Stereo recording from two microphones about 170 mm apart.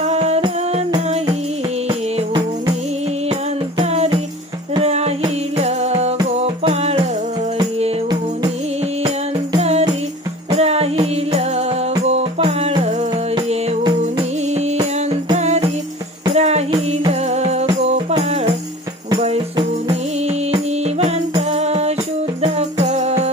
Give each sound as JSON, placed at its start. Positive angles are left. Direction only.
{"t": 0.0, "sound": "music", "side_deg": -40}
{"t": 1.9, "sound": "music", "side_deg": -35}
{"t": 9.6, "sound": "music", "side_deg": -40}